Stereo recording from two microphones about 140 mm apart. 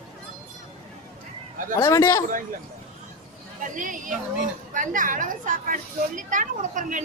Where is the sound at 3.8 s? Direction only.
70° right (ahead or behind).